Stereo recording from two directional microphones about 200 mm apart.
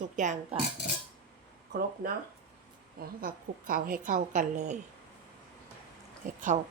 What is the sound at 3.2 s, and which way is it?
Speech, 45° right (ahead or behind).